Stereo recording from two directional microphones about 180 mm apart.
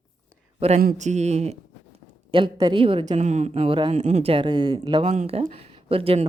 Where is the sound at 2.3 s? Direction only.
25° right (ahead or behind).